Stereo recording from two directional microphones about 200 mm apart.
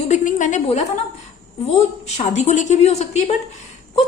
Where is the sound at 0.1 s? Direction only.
40° left (ahead or behind).